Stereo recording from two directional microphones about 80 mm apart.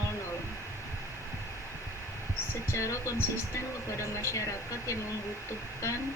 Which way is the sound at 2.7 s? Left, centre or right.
Left.